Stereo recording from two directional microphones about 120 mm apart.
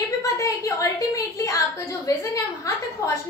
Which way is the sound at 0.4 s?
25° left (ahead or behind).